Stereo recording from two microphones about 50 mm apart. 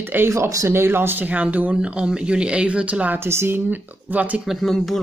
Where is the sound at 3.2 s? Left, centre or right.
Right.